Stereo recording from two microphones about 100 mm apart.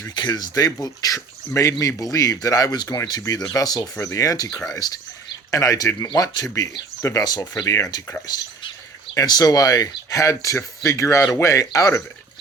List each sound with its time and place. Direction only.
0.1 s speech: 45° left (ahead or behind)
3.9 s speech: 30° left (ahead or behind)
9.1 s speech: 40° left (ahead or behind)